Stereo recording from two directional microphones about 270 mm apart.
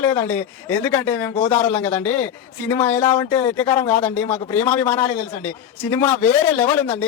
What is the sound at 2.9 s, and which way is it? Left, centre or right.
Speech, left.